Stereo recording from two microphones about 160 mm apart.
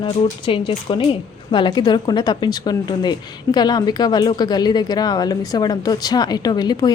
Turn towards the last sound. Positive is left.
turn(degrees=25)  # may be behind; listen again after turning